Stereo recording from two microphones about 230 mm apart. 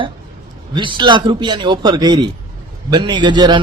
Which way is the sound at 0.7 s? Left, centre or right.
Centre.